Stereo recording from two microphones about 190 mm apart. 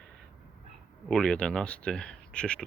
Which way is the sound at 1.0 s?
5° left (ahead or behind).